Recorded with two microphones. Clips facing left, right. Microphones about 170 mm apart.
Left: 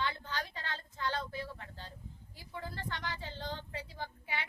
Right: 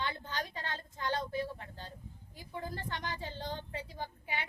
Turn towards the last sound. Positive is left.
turn(degrees=-15)  # may be behind; listen again after turning